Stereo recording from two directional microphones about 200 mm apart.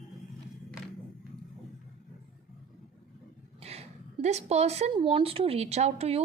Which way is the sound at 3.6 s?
30° right (ahead or behind).